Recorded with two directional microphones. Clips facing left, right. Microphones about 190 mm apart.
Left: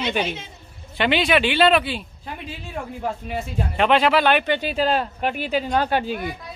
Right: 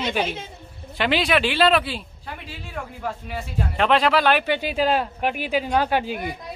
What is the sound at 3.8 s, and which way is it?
Speech, centre (ahead or behind).